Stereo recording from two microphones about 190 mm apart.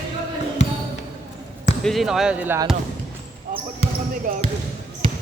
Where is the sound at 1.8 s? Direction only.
Centre (ahead or behind).